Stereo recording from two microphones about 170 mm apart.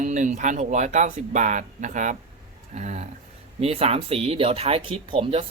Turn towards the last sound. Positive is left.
turn(degrees=-30)  # may be behind; listen again after turning